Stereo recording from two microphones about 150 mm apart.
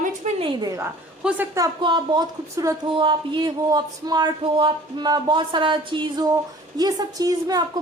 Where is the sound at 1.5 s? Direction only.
25° right (ahead or behind).